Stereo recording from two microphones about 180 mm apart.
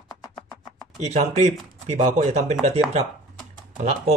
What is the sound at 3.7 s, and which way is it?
Speech, 35° right (ahead or behind).